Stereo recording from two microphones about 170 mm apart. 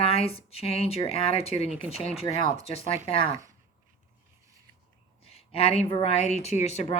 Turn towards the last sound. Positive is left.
turn(degrees=40)  # may be behind; listen again after turning